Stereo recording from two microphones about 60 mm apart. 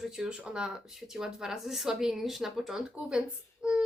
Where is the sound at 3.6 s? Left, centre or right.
Centre.